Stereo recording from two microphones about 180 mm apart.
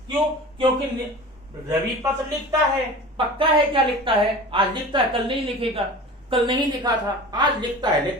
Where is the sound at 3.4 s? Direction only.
30° right (ahead or behind).